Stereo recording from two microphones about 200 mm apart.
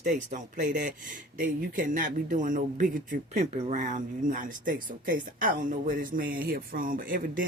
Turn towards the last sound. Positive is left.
turn(degrees=-45)  # may be behind; listen again after turning